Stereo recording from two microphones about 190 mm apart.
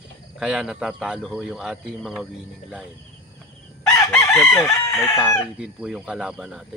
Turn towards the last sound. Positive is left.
turn(degrees=0)  # may be behind; listen again after turning